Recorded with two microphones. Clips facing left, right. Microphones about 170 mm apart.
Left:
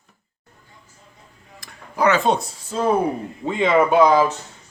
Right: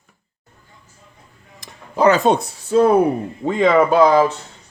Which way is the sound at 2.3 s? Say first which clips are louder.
Right 5 dB; 60° right (ahead or behind).